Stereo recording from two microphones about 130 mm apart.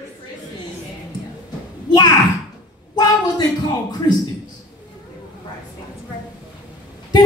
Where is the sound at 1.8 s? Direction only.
35° left (ahead or behind).